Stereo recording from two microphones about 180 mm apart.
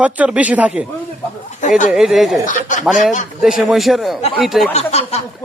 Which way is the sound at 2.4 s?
45° left (ahead or behind).